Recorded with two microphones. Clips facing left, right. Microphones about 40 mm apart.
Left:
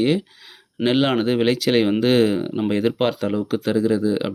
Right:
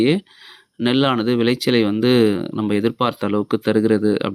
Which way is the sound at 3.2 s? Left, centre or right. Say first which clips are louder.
Right 3 dB; right.